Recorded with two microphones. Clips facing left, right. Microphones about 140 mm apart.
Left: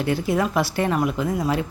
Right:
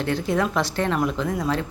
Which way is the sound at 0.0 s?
5° left (ahead or behind).